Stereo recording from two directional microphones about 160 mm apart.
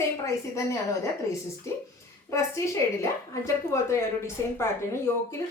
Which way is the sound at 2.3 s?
20° left (ahead or behind).